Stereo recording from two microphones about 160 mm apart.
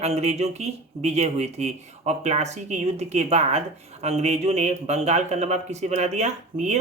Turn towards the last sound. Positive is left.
turn(degrees=-45)  # may be behind; listen again after turning